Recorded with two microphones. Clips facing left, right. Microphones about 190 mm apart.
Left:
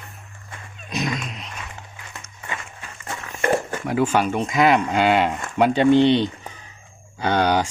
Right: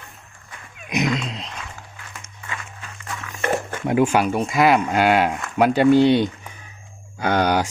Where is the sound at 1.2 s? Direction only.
30° right (ahead or behind).